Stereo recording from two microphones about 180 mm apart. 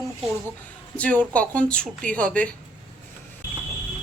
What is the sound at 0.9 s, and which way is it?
A woman's voice, 10° left (ahead or behind).